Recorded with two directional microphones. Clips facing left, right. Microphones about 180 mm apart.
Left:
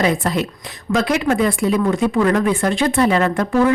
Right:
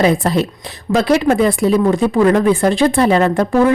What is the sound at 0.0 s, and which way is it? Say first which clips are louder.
Speech: right 4 dB; 30° right (ahead or behind).